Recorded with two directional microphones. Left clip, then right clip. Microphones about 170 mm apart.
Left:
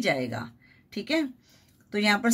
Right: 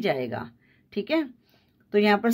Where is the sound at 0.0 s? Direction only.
30° right (ahead or behind).